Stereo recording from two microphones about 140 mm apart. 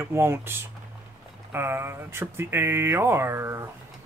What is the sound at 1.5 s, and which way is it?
Speech, 15° right (ahead or behind).